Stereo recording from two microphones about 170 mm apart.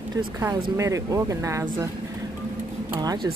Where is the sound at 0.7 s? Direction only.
20° right (ahead or behind).